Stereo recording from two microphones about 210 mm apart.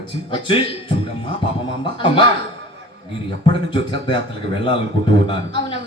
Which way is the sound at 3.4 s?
25° left (ahead or behind).